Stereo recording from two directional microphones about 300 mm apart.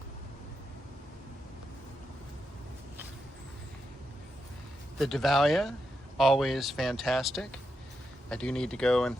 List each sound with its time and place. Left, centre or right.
4.9 s speech: centre